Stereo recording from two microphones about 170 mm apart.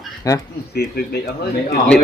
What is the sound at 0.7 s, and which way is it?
Speech, 70° left (ahead or behind).